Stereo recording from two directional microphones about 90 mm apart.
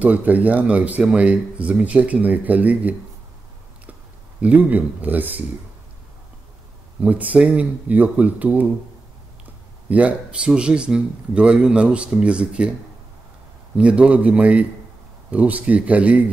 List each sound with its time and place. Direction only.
0.0 s speech: 15° right (ahead or behind)
4.4 s speech: 15° right (ahead or behind)
7.0 s speech: 15° right (ahead or behind)
9.8 s speech: 15° right (ahead or behind)
13.7 s speech: 15° right (ahead or behind)